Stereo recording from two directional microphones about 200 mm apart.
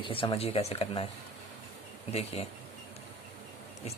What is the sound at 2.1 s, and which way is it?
Speech, 30° left (ahead or behind).